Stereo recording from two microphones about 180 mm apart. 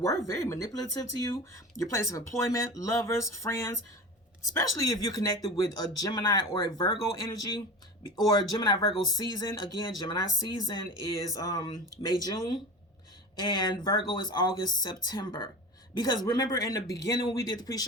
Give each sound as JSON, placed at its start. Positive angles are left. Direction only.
{"t": 0.3, "sound": "speech", "side_deg": 15}